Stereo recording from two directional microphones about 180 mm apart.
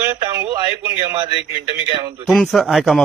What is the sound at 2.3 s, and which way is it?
Speech, centre (ahead or behind).